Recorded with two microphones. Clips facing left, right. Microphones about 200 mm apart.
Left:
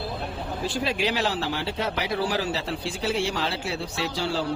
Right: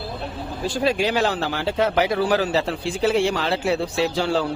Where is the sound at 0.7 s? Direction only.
45° right (ahead or behind).